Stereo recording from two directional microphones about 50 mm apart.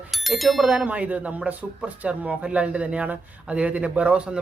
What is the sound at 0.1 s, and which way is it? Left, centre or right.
Bicycle bell, centre.